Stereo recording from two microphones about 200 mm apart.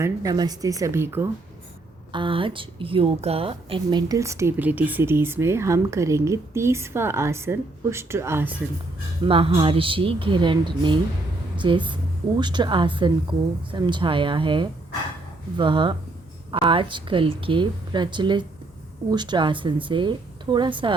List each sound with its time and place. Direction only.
0.0 s speech: 15° right (ahead or behind)
2.1 s speech: 25° right (ahead or behind); by 8.6 s 10° right (ahead or behind)
9.2 s speech: 30° right (ahead or behind)